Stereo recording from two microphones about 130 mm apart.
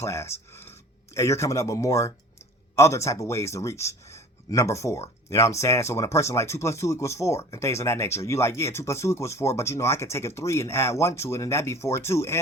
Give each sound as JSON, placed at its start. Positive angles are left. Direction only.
{"t": 0.0, "sound": "a man's voice", "side_deg": 20}